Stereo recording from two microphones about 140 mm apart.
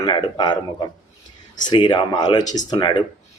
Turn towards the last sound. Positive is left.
turn(degrees=35)  # may be behind; listen again after turning